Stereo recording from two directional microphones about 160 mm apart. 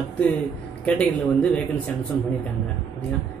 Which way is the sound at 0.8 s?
10° left (ahead or behind).